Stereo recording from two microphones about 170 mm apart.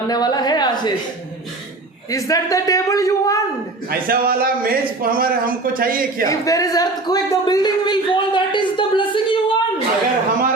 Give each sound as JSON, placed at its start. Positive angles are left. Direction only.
{"t": 0.1, "sound": "a sound", "side_deg": 25}
{"t": 2.0, "sound": "a man's voice", "side_deg": 20}
{"t": 3.8, "sound": "a man's voice", "side_deg": -60}
{"t": 6.2, "sound": "speech", "side_deg": 20}